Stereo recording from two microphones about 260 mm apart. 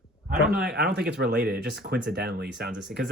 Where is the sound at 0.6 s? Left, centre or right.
Right.